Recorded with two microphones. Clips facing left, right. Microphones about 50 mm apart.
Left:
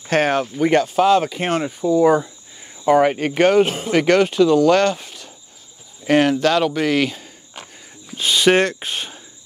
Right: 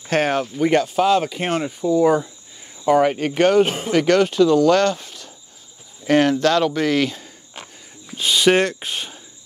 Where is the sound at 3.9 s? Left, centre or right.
Left; by 7.2 s centre.